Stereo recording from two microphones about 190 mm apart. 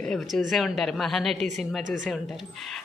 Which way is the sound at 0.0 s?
Centre (ahead or behind).